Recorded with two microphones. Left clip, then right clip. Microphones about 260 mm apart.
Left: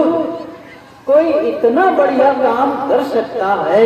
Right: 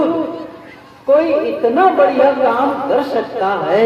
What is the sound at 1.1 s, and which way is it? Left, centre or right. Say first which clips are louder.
A woman's voice: left 2 dB; right.